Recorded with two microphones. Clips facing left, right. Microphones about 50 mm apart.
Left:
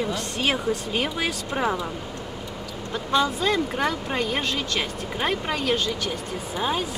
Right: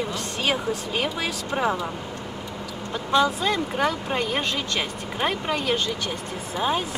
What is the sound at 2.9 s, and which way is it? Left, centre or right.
Speech, centre.